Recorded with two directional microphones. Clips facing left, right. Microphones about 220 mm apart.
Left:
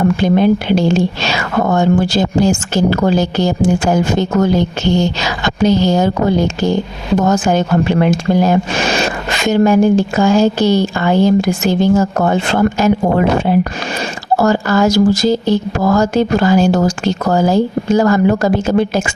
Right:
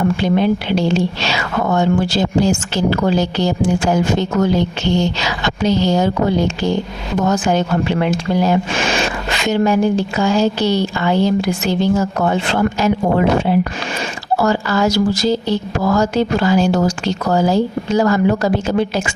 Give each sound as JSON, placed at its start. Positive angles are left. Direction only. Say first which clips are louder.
{"t": 0.0, "sound": "speech", "louder": "left 3 dB", "side_deg": 45}